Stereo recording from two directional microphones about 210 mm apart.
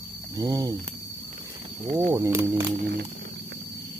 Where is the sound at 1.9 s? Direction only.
30° right (ahead or behind).